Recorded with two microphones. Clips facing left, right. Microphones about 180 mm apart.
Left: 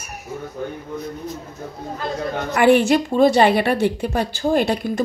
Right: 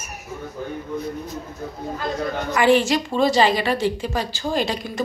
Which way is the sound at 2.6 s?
55° left (ahead or behind).